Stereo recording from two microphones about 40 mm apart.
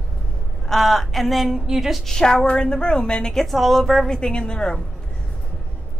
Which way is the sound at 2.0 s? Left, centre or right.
Centre.